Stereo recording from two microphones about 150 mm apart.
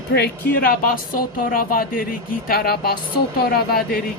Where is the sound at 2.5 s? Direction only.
90° left.